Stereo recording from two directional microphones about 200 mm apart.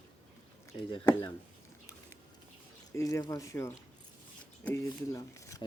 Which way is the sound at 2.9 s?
15° left (ahead or behind).